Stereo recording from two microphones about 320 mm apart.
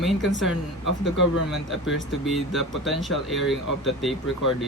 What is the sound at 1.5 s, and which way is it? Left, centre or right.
Speech, centre.